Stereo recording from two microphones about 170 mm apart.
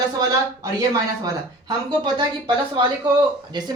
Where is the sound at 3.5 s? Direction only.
25° right (ahead or behind).